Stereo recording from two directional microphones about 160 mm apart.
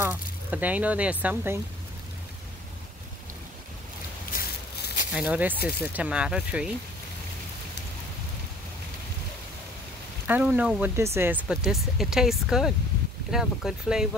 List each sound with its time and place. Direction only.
0.0 s speech: 10° right (ahead or behind)
4.4 s a sound: 70° left (ahead or behind)
5.1 s speech: 5° right (ahead or behind)
10.2 s speech: 10° right (ahead or behind)